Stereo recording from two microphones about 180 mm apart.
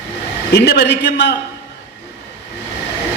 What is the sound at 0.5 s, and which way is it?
Speech, 65° left (ahead or behind).